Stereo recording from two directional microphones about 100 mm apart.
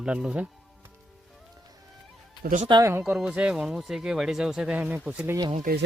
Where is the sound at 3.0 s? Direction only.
5° right (ahead or behind).